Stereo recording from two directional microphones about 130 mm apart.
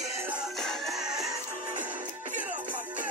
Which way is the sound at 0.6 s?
Centre (ahead or behind).